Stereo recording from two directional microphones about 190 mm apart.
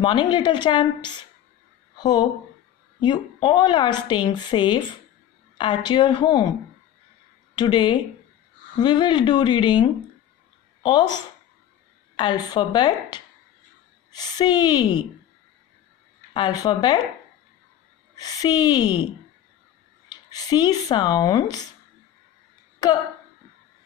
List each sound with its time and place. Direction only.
0.0 s a woman's voice: 25° left (ahead or behind)
7.5 s a woman's voice: 25° left (ahead or behind)
16.3 s a woman's voice: 25° left (ahead or behind)
18.1 s a woman's voice: 20° left (ahead or behind)
20.1 s speech: 20° left (ahead or behind)